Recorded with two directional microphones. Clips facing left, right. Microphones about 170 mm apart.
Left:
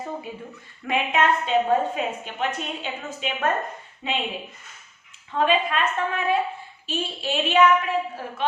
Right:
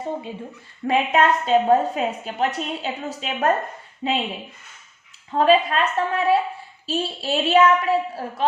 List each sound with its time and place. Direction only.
0.9 s a woman's voice: 40° right (ahead or behind)
5.3 s a woman's voice: 35° right (ahead or behind)